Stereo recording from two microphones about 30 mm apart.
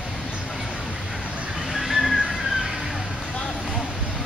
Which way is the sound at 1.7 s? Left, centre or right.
Centre.